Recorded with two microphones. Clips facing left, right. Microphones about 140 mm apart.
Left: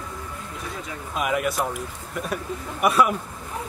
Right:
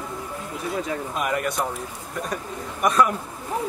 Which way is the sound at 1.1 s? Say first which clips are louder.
Left 4 dB; centre (ahead or behind).